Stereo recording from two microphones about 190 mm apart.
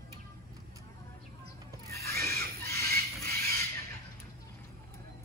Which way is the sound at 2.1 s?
55° right (ahead or behind).